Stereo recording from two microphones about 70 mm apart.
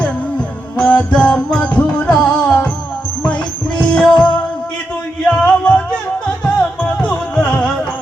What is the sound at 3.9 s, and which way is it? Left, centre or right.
Music, centre.